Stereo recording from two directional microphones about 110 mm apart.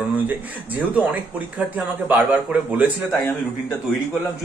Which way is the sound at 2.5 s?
10° right (ahead or behind).